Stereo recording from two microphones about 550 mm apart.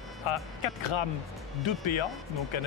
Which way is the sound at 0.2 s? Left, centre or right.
Left.